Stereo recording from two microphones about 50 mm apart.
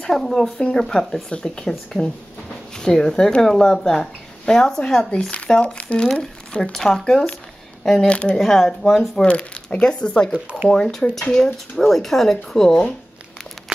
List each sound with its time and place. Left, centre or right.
0.0 s speech: centre
5.5 s speech: left
6.7 s speech: centre
8.4 s speech: centre
9.1 s speech: left